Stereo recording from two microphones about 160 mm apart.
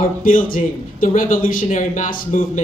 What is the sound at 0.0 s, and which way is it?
Speech, 60° left (ahead or behind).